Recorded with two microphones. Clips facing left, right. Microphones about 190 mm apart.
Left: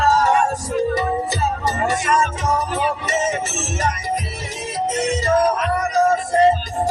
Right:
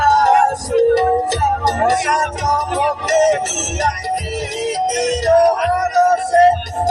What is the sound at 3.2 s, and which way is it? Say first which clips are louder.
Music: right 7 dB; 70° right (ahead or behind).